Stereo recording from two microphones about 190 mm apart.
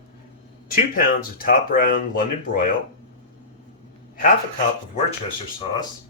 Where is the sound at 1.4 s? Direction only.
50° left (ahead or behind).